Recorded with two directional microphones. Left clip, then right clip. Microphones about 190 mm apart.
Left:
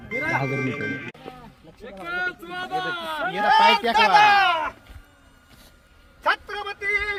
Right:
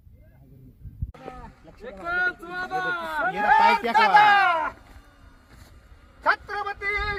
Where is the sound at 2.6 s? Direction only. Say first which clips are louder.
Left 2 dB; 30° left (ahead or behind).